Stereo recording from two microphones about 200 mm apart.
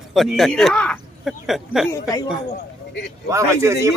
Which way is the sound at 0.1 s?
Centre (ahead or behind).